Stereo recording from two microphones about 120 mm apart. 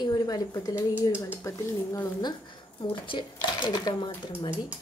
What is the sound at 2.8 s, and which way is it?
A woman's voice, 45° left (ahead or behind).